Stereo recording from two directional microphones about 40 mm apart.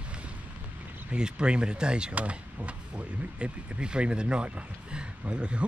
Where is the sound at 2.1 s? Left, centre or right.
Right.